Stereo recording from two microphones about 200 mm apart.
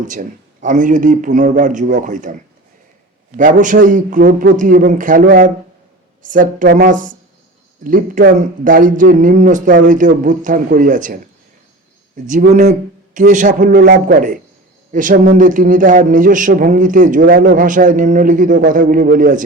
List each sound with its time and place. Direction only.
0.0 s speech: 40° right (ahead or behind)
3.3 s speech: 40° right (ahead or behind)
12.3 s a man's voice: 40° right (ahead or behind)